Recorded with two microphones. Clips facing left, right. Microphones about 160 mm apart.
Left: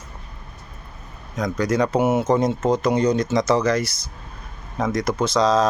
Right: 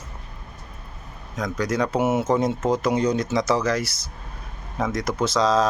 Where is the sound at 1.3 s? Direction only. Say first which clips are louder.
Left 3 dB; centre (ahead or behind).